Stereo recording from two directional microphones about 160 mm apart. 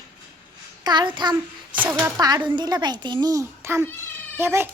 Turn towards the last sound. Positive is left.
turn(degrees=-15)  # may be behind; listen again after turning